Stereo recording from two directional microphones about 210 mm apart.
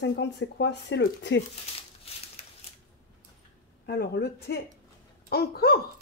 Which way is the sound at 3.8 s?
50° left (ahead or behind).